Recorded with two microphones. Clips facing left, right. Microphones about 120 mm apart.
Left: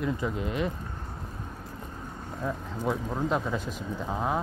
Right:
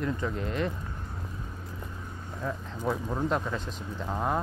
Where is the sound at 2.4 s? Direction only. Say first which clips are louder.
Left 2 dB; centre (ahead or behind).